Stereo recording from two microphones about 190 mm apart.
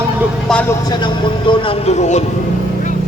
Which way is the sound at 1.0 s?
25° left (ahead or behind).